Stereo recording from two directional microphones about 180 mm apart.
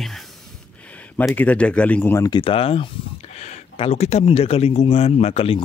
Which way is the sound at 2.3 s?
30° left (ahead or behind).